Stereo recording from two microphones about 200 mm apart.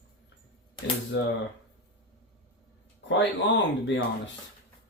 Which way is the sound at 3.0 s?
65° left (ahead or behind).